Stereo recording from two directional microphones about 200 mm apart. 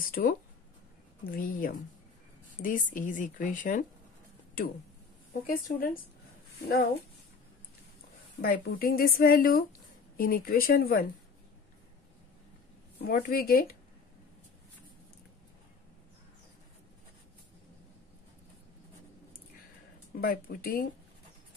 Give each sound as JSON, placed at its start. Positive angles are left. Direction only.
{"t": 0.0, "sound": "a woman's voice", "side_deg": 45}
{"t": 8.4, "sound": "speech", "side_deg": 50}
{"t": 13.0, "sound": "speech", "side_deg": 50}
{"t": 20.2, "sound": "speech", "side_deg": 45}